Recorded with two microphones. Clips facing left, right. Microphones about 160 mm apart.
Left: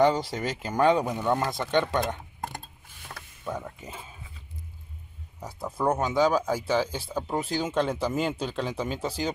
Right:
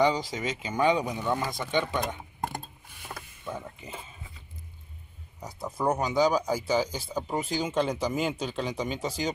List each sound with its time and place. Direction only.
0.0 s speech: centre (ahead or behind)
0.9 s speech: 50° left (ahead or behind)
1.4 s speech: 5° right (ahead or behind)
5.4 s speech: 5° left (ahead or behind)